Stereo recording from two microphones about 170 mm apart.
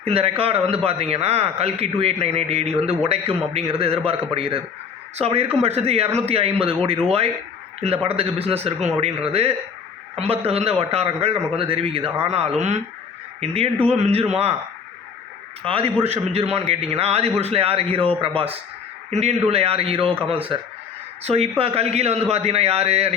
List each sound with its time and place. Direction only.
0.0 s speech: 35° right (ahead or behind)
15.6 s speech: 30° right (ahead or behind)